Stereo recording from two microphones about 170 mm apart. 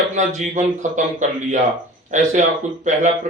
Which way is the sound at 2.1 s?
45° right (ahead or behind).